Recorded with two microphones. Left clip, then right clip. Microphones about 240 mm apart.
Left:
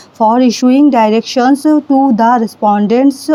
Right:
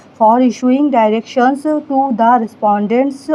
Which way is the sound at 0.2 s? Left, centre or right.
Left.